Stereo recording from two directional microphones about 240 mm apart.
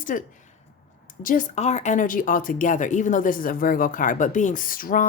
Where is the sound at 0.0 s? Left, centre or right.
Left.